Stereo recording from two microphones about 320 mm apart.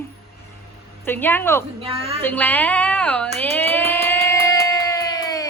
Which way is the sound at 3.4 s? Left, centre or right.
Centre.